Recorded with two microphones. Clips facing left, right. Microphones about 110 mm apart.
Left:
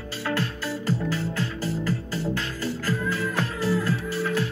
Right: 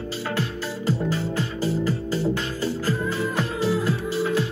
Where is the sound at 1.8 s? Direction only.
20° right (ahead or behind).